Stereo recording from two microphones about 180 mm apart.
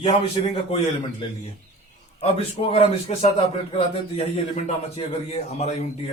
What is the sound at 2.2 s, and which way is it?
A man's voice, 35° left (ahead or behind).